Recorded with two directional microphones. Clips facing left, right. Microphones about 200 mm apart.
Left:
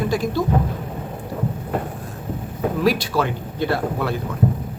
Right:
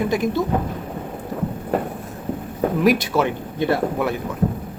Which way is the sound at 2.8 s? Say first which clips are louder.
Right 2 dB; 20° right (ahead or behind).